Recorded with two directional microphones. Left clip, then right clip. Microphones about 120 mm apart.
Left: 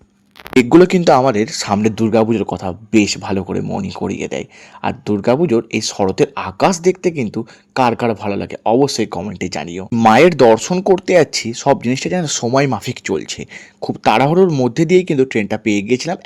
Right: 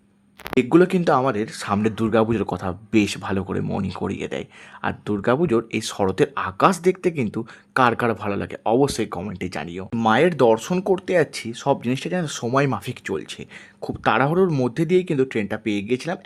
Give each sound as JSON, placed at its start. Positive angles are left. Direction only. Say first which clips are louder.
{"t": 0.5, "sound": "speech", "louder": "left 7 dB", "side_deg": 45}
{"t": 2.0, "sound": "speech", "louder": "left 4 dB", "side_deg": 20}
{"t": 3.6, "sound": "speech", "louder": "left 5 dB", "side_deg": 0}
{"t": 4.0, "sound": "speech", "louder": "left 6 dB", "side_deg": 20}
{"t": 9.4, "sound": "speech", "louder": "left 6 dB", "side_deg": 25}
{"t": 10.1, "sound": "speech", "louder": "left 9 dB", "side_deg": 55}
{"t": 10.3, "sound": "speech", "louder": "left 7 dB", "side_deg": 40}
{"t": 14.4, "sound": "speech", "louder": "left 7 dB", "side_deg": 15}
{"t": 14.7, "sound": "speech", "louder": "left 7 dB", "side_deg": 35}